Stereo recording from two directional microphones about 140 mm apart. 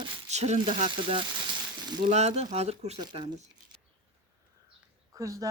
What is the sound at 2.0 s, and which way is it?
Speech, 55° right (ahead or behind).